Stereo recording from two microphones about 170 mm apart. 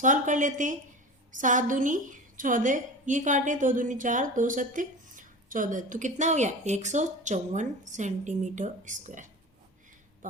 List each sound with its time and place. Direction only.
0.0 s a woman's voice: 50° right (ahead or behind)